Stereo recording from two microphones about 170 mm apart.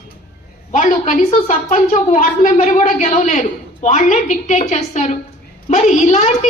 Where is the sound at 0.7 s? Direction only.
45° left (ahead or behind).